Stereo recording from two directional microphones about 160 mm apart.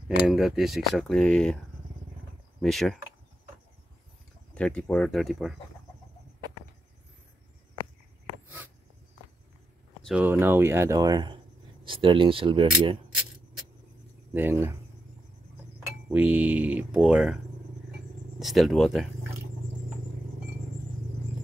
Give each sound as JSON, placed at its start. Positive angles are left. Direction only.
{"t": 0.3, "sound": "speech", "side_deg": 0}
{"t": 2.6, "sound": "speech", "side_deg": 0}
{"t": 4.6, "sound": "speech", "side_deg": 5}
{"t": 10.0, "sound": "speech", "side_deg": -5}
{"t": 14.3, "sound": "speech", "side_deg": -15}
{"t": 16.1, "sound": "speech", "side_deg": -10}
{"t": 18.4, "sound": "speech", "side_deg": 0}